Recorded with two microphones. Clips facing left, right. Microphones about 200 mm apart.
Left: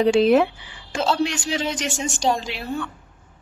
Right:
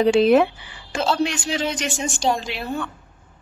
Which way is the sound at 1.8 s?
55° right (ahead or behind).